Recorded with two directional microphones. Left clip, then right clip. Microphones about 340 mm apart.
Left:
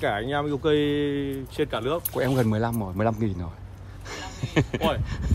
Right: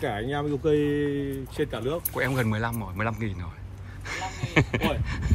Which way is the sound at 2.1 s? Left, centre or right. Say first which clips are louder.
Left 2 dB; centre.